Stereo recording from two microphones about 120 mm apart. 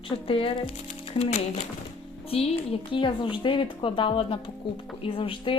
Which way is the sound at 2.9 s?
45° left (ahead or behind).